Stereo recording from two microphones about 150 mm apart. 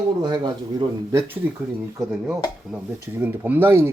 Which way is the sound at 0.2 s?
30° right (ahead or behind).